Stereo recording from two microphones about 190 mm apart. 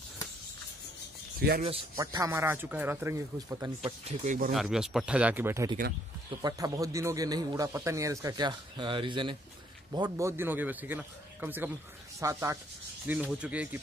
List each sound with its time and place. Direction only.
1.6 s speech: 30° right (ahead or behind)
2.0 s speech: 15° right (ahead or behind)
3.8 s speech: 35° right (ahead or behind)
4.5 s a man's voice: centre (ahead or behind)